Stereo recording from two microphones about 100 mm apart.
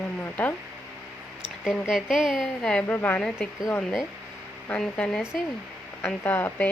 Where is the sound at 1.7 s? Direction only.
Centre (ahead or behind).